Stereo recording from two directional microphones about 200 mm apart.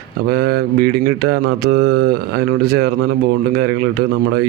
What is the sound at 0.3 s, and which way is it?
Mantra, 50° right (ahead or behind).